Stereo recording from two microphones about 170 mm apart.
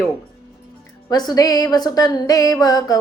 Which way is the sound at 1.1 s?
25° left (ahead or behind).